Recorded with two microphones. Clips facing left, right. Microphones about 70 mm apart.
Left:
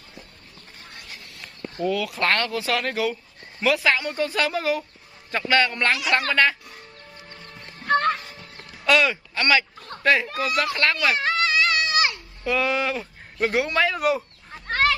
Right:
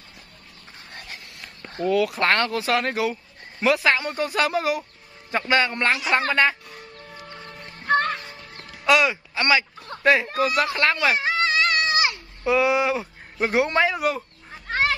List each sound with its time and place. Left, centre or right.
1.9 s speech: right
8.8 s speech: centre
10.0 s speech: right
13.9 s a sound: centre